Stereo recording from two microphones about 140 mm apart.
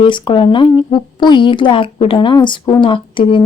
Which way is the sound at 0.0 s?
35° left (ahead or behind).